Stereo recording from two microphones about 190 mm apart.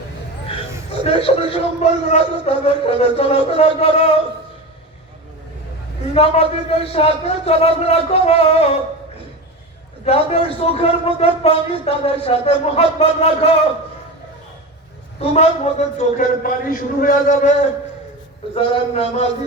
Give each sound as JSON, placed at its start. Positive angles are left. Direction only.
{"t": 1.0, "sound": "a man's voice", "side_deg": 30}
{"t": 6.1, "sound": "a man's voice", "side_deg": 30}
{"t": 10.1, "sound": "a man's voice", "side_deg": 30}
{"t": 15.2, "sound": "a man's voice", "side_deg": 35}
{"t": 18.5, "sound": "a man's voice", "side_deg": 30}